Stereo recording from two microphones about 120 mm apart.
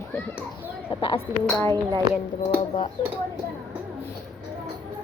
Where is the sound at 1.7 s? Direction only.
35° right (ahead or behind).